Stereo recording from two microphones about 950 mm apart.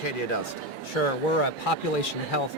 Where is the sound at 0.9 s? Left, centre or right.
Left.